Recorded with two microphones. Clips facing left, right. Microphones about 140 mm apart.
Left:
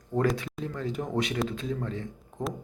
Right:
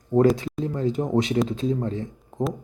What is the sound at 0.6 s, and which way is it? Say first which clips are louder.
Speech: right 9 dB; 30° right (ahead or behind).